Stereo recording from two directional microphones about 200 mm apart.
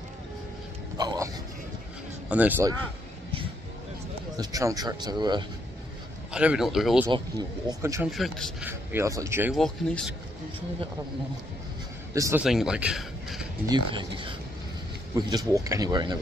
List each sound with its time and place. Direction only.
0.9 s a sound: 20° right (ahead or behind)
2.2 s speech: 10° right (ahead or behind)
4.4 s speech: 15° right (ahead or behind)
6.3 s speech: 5° right (ahead or behind)
7.1 s speech: 20° right (ahead or behind)
8.1 s speech: centre (ahead or behind)
8.6 s speech: 15° right (ahead or behind)
9.6 s speech: 5° left (ahead or behind)
12.1 s a man's voice: 15° right (ahead or behind)
12.4 s speech: centre (ahead or behind)
13.7 s speech: 25° right (ahead or behind)